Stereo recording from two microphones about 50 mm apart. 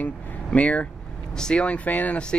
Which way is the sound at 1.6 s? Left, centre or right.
Left.